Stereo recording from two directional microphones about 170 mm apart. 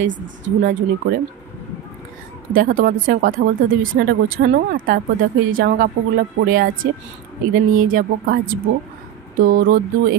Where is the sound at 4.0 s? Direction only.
70° right (ahead or behind).